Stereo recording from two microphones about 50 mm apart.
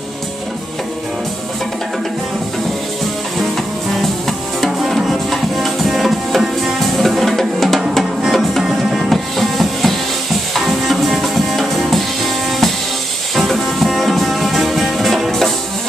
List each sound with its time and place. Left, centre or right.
3.9 s music: centre
7.0 s drum: centre
8.0 s music: centre
13.4 s music: centre